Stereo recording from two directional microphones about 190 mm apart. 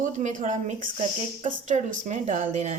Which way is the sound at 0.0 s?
40° right (ahead or behind).